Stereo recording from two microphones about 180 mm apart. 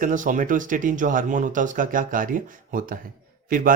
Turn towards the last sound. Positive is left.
turn(degrees=-50)  # may be behind; listen again after turning